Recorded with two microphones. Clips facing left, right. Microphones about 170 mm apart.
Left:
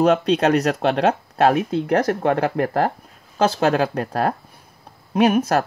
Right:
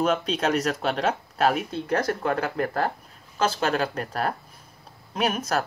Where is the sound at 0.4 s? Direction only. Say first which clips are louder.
Left 6 dB; 70° left (ahead or behind).